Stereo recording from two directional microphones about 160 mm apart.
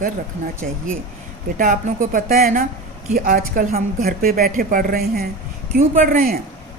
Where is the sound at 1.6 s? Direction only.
60° right (ahead or behind).